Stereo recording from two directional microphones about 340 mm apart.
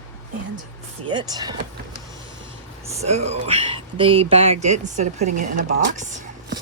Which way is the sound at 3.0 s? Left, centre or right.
Centre.